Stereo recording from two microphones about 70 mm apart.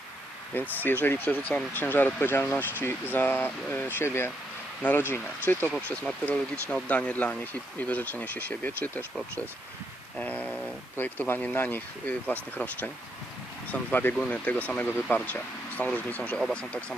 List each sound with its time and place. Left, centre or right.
0.5 s speech: left
4.8 s speech: left
5.9 s speech: centre
10.2 s speech: centre
10.9 s speech: left
16.4 s speech: centre